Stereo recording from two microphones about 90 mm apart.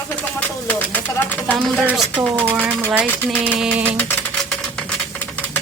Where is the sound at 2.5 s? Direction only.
20° right (ahead or behind).